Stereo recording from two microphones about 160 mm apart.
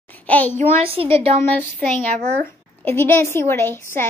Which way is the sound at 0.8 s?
35° right (ahead or behind).